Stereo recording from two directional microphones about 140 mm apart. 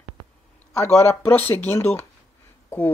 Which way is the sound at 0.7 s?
15° left (ahead or behind).